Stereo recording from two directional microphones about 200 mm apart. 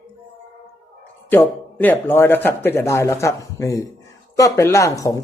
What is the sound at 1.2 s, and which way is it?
Speech, 10° left (ahead or behind).